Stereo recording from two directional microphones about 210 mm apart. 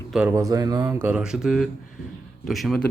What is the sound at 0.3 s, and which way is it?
A man's voice, 15° right (ahead or behind).